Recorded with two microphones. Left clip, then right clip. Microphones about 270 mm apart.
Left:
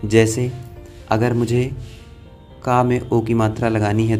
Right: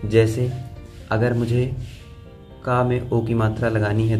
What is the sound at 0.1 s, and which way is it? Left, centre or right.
Speech, left.